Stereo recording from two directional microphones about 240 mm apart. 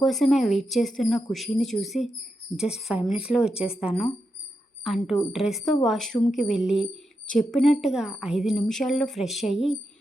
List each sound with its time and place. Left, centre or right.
0.0 s a woman's voice: centre